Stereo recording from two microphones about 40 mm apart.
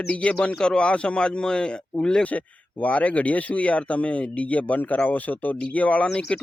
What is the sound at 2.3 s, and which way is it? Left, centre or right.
Speech, left.